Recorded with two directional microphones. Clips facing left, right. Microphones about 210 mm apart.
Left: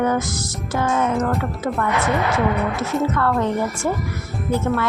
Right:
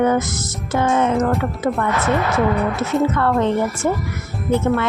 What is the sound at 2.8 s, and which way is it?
A woman's voice, 25° right (ahead or behind).